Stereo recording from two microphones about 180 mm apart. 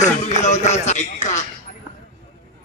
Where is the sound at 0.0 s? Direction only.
40° left (ahead or behind).